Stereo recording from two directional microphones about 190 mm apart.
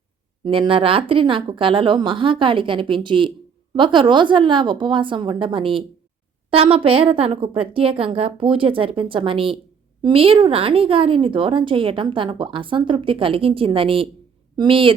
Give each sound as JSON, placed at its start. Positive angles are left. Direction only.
{"t": 0.4, "sound": "a woman's voice", "side_deg": -25}